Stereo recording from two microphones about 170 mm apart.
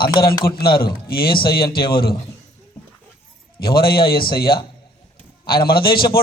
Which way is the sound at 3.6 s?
65° left (ahead or behind).